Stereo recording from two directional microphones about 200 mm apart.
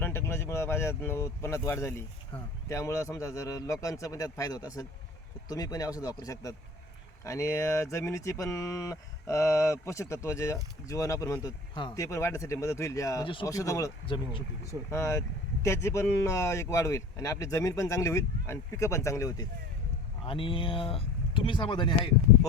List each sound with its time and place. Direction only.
0.0 s speech: 10° left (ahead or behind)
2.3 s speech: 25° left (ahead or behind)
2.6 s speech: 15° left (ahead or behind)
14.6 s speech: 15° left (ahead or behind)
20.2 s speech: 25° left (ahead or behind)